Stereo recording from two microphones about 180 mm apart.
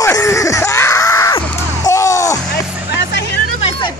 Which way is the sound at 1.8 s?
15° left (ahead or behind).